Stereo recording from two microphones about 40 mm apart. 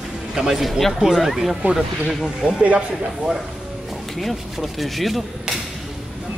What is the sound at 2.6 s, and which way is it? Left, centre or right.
Speech, right.